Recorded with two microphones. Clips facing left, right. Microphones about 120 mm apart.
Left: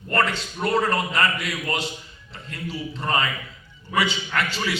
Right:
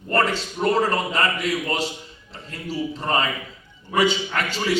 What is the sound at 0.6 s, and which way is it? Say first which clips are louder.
Speech: right 2 dB; 35° right (ahead or behind).